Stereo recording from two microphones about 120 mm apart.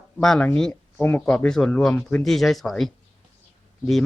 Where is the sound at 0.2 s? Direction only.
5° left (ahead or behind).